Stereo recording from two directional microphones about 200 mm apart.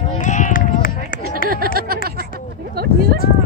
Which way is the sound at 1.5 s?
45° right (ahead or behind).